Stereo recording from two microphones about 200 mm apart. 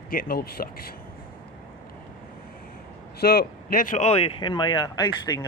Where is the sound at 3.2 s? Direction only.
50° left (ahead or behind).